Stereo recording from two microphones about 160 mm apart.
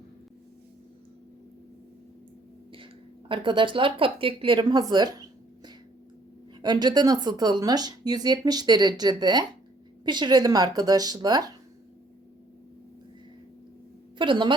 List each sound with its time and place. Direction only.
2.7 s speech: 30° right (ahead or behind)
6.6 s speech: 25° right (ahead or behind)
14.2 s a woman's voice: 30° right (ahead or behind)